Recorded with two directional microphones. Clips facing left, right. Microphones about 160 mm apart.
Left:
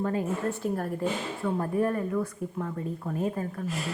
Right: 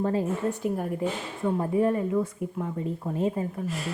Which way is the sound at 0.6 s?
15° right (ahead or behind).